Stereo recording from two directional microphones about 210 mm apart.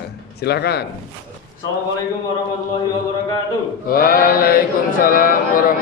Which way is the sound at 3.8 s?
45° left (ahead or behind).